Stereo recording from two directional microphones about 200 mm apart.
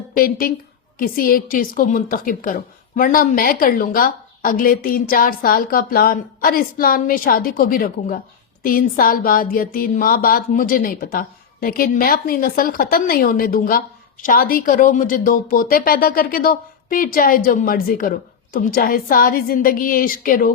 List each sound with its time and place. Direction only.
0.1 s speech: 45° left (ahead or behind)